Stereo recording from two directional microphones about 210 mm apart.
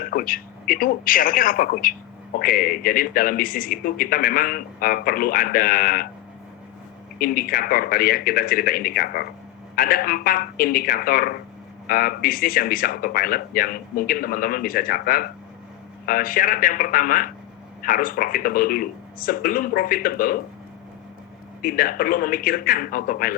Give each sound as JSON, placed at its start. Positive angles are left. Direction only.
{"t": 0.1, "sound": "speech", "side_deg": 45}
{"t": 7.2, "sound": "a man's voice", "side_deg": 45}
{"t": 21.6, "sound": "speech", "side_deg": 40}